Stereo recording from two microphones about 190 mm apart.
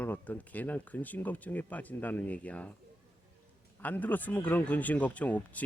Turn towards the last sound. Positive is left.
turn(degrees=10)  # may be behind; listen again after turning